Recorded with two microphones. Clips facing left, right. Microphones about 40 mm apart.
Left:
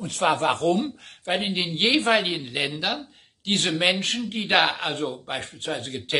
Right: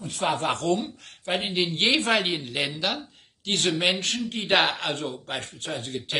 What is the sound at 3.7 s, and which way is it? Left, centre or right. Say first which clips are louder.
Speech: left 2 dB; left.